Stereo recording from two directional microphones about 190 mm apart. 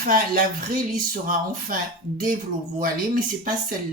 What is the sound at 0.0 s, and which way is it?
Speech, 45° right (ahead or behind).